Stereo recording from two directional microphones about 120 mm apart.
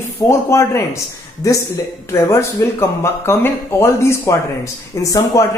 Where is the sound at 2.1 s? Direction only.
25° left (ahead or behind).